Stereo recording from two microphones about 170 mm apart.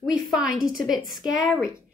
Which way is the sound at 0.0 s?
Centre (ahead or behind).